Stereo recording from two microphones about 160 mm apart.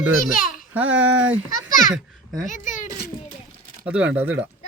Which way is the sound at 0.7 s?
10° right (ahead or behind).